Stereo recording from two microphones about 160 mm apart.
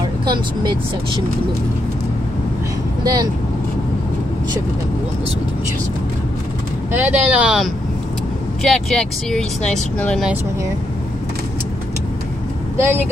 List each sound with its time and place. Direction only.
0.0 s speech: 25° right (ahead or behind)
3.0 s speech: 25° right (ahead or behind)
6.9 s speech: 10° right (ahead or behind); by 10.2 s 5° left (ahead or behind)
12.7 s speech: 15° right (ahead or behind)